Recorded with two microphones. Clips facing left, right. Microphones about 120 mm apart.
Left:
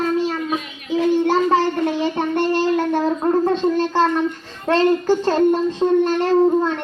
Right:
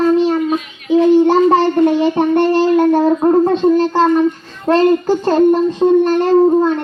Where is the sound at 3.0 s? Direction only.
20° right (ahead or behind).